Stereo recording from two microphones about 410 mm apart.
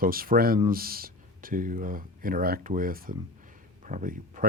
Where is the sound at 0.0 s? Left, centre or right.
Right.